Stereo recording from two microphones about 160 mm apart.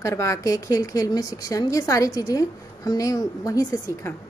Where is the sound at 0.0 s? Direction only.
20° left (ahead or behind).